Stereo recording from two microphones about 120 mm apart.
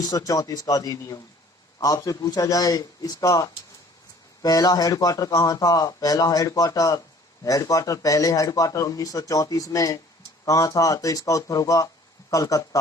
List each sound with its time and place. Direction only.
0.0 s a man's voice: 30° left (ahead or behind)